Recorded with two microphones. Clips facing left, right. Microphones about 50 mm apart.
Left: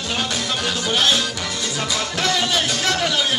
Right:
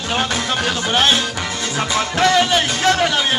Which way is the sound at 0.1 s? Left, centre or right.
Right.